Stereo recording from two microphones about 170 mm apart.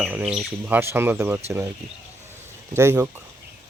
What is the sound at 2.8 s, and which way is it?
Speech, 15° right (ahead or behind).